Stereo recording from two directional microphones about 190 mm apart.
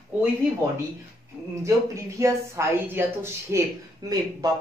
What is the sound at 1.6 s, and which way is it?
Speech, 15° right (ahead or behind).